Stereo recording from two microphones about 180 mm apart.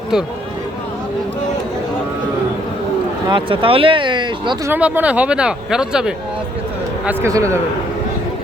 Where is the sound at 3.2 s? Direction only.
30° right (ahead or behind).